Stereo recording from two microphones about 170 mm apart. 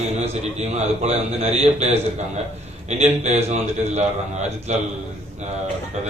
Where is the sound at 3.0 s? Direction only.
40° right (ahead or behind).